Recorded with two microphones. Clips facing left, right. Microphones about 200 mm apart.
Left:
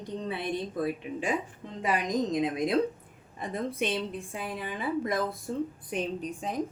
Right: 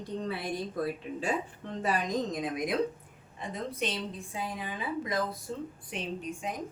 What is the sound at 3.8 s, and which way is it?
Speech, 60° left (ahead or behind).